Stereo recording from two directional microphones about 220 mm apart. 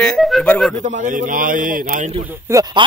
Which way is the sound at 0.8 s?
35° right (ahead or behind).